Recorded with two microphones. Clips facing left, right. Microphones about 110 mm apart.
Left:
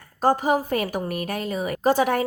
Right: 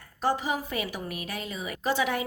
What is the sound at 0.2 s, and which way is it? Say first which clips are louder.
A woman's voice: left 7 dB; 45° left (ahead or behind).